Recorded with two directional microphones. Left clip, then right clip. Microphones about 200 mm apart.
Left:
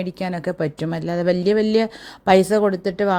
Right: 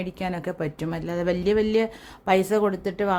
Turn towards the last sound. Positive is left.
turn(degrees=20)  # may be behind; listen again after turning